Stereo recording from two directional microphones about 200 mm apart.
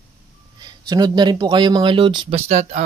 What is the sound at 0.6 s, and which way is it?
Speech, 20° right (ahead or behind).